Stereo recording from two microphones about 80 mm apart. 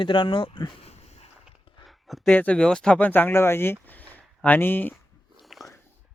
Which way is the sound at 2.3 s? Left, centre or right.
Centre.